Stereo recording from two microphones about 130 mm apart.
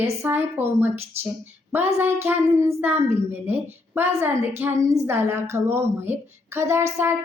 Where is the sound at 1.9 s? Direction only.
15° right (ahead or behind).